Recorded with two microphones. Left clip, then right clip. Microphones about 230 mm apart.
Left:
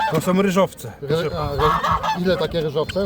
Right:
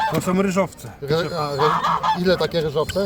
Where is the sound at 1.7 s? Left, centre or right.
Left.